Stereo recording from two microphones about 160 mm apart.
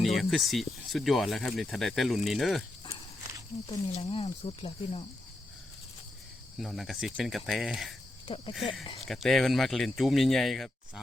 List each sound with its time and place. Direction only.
0.0 s speech: centre (ahead or behind)
3.7 s speech: 40° left (ahead or behind)
6.6 s speech: centre (ahead or behind)